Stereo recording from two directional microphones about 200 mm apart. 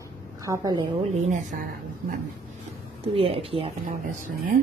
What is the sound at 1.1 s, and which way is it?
Speech, 40° right (ahead or behind).